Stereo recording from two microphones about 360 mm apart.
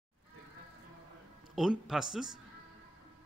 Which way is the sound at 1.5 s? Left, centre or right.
Centre.